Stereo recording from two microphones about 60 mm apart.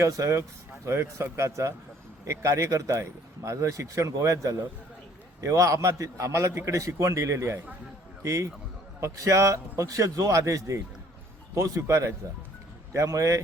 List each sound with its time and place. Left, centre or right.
0.0 s a man's voice: right
0.9 s a man's voice: right